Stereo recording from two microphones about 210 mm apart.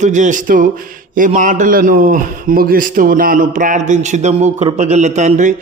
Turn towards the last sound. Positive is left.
turn(degrees=-35)  # may be behind; listen again after turning